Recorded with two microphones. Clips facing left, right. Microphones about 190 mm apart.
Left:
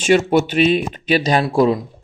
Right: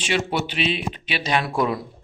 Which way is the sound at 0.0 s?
45° left (ahead or behind).